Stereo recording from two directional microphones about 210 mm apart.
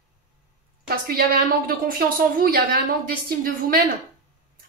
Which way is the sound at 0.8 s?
45° right (ahead or behind).